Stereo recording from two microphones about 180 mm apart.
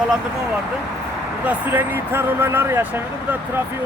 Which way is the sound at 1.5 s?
10° right (ahead or behind).